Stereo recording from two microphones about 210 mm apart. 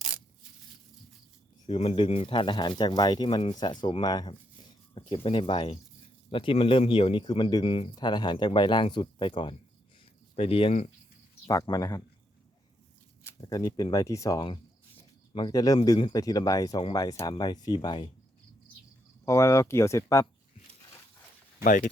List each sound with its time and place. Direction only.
1.6 s speech: 25° left (ahead or behind)
11.4 s speech: 20° left (ahead or behind)
13.2 s speech: 20° left (ahead or behind)
19.2 s speech: 15° left (ahead or behind)
21.6 s speech: 40° left (ahead or behind)